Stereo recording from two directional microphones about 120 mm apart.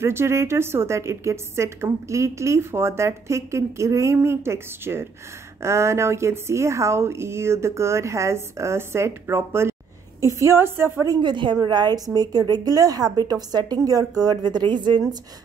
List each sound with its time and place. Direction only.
0.0 s a woman's voice: 20° right (ahead or behind)
11.1 s a woman's voice: 40° right (ahead or behind)